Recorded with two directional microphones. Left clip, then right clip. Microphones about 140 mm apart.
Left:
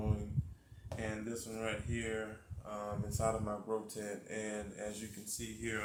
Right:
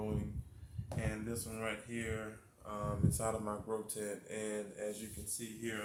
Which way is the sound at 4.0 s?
20° right (ahead or behind).